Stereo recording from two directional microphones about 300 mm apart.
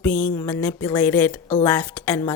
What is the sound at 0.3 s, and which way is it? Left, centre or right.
Speech, centre.